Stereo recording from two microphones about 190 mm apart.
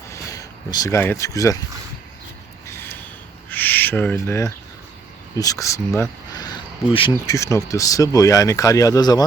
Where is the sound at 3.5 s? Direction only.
10° left (ahead or behind).